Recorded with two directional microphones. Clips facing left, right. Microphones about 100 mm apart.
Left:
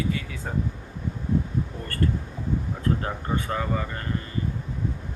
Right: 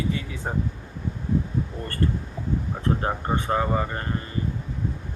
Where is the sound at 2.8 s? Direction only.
30° right (ahead or behind).